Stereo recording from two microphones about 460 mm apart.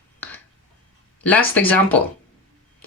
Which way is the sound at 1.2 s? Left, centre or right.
Centre.